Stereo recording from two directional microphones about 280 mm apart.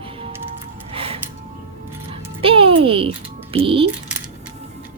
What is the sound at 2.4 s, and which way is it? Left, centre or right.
Music, centre.